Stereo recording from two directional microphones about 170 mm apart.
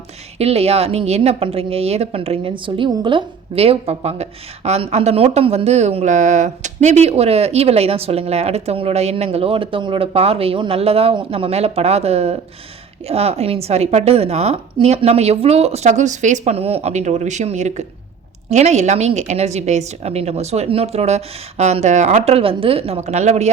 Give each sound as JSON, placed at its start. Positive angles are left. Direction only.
{"t": 0.3, "sound": "a woman's voice", "side_deg": -35}